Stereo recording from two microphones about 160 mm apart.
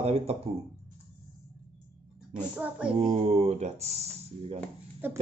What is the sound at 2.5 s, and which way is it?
Speech, 5° right (ahead or behind).